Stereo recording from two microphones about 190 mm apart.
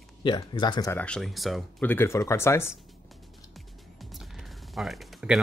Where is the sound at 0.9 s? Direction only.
5° left (ahead or behind).